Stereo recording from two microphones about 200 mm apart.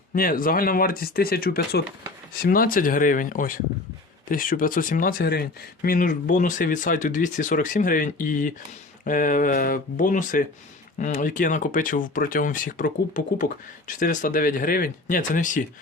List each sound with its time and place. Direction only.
0.1 s speech: 45° left (ahead or behind)